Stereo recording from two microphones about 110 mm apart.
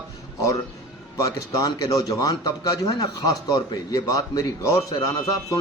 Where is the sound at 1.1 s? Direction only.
30° left (ahead or behind).